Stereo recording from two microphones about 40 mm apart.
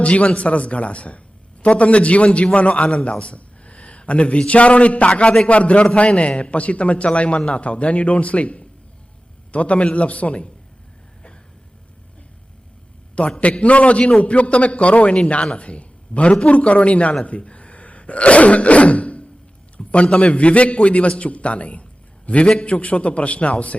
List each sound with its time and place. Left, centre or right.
0.0 s a man's voice: left
13.4 s a man's voice: left
19.7 s a sound: left
20.1 s a man's voice: left